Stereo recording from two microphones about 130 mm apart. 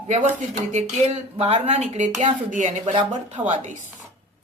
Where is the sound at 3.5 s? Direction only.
65° right (ahead or behind).